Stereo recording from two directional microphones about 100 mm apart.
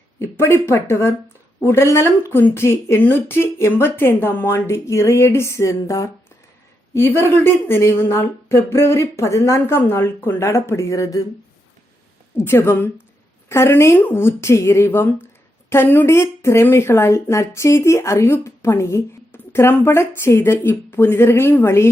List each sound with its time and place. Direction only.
0.2 s speech: 25° left (ahead or behind)
12.4 s speech: 25° left (ahead or behind)